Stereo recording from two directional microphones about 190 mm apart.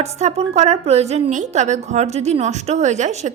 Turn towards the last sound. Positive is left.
turn(degrees=-35)  # may be behind; listen again after turning